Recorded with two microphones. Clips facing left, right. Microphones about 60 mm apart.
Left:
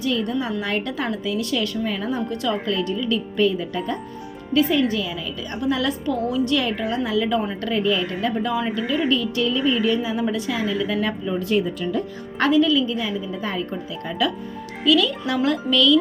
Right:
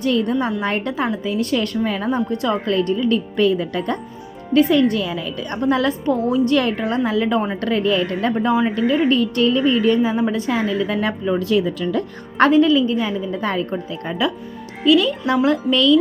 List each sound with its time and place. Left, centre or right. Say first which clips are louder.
0.0 s a woman's voice: right 5 dB; right
0.6 s a woman's voice: right 4 dB; right
2.6 s a woman's voice: right 5 dB; right
6.6 s a woman's voice: right 4 dB; right
8.4 s a woman's voice: right 5 dB; right
11.3 s speech: right 1 dB; right
12.4 s a woman's voice: right 4 dB; right
14.1 s a woman's voice: right 2 dB; right